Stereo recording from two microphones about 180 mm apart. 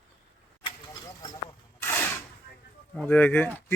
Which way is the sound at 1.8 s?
10° left (ahead or behind).